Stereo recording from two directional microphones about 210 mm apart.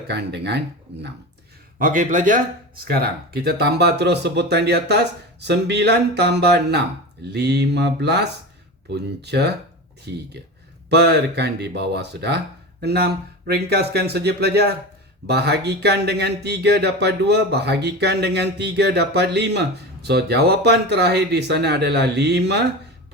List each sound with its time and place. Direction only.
0.1 s speech: 55° right (ahead or behind)
1.8 s speech: 40° right (ahead or behind)